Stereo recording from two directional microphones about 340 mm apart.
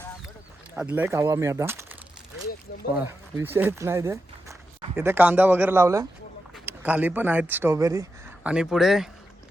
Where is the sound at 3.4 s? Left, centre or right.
Centre.